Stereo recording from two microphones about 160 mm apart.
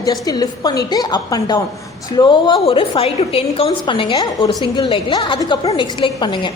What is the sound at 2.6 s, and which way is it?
A woman's voice, 35° left (ahead or behind).